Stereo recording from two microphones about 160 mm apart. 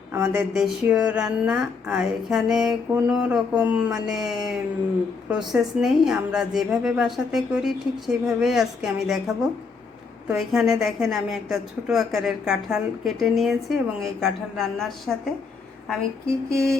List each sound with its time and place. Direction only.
0.1 s speech: 15° right (ahead or behind)
0.5 s a woman's voice: 5° right (ahead or behind)